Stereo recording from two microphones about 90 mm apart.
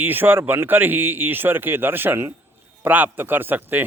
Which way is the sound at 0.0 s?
20° right (ahead or behind).